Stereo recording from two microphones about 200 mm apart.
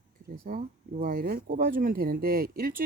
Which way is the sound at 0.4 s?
45° right (ahead or behind).